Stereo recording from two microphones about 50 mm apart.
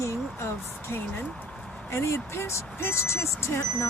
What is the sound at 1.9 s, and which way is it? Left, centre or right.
Speech, left.